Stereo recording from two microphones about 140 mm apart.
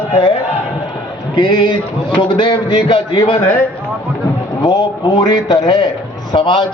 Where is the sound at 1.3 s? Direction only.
35° left (ahead or behind).